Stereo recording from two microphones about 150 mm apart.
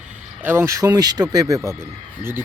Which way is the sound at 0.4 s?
20° right (ahead or behind).